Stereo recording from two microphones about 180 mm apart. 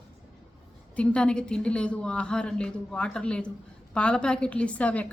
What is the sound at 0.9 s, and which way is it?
A woman's voice, 5° left (ahead or behind).